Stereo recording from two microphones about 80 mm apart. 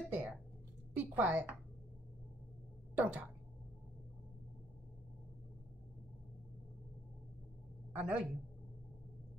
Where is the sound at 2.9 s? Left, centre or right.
Centre.